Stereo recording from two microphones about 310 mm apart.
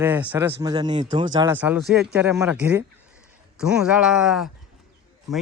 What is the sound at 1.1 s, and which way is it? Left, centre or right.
Speech, right.